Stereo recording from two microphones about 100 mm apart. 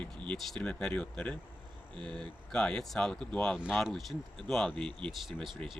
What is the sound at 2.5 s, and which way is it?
Speech, 5° left (ahead or behind).